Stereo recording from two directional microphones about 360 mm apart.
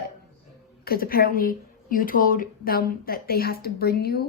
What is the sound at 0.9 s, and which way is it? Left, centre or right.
Speech, left.